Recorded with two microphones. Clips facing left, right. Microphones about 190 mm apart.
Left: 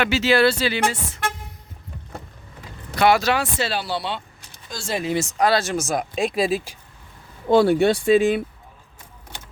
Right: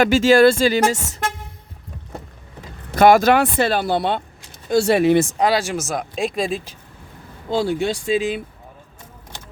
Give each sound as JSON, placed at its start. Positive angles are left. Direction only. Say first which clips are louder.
{"t": 0.0, "sound": "speech", "louder": "right 6 dB", "side_deg": -45}
{"t": 2.9, "sound": "speech", "louder": "right 6 dB", "side_deg": -45}
{"t": 4.7, "sound": "speech", "louder": "right 10 dB", "side_deg": -65}
{"t": 5.4, "sound": "speech", "louder": "right 1 dB", "side_deg": -15}
{"t": 7.5, "sound": "speech", "louder": "left 5 dB", "side_deg": 60}